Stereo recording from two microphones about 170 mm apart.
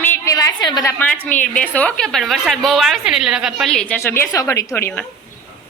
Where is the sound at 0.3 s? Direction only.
25° left (ahead or behind).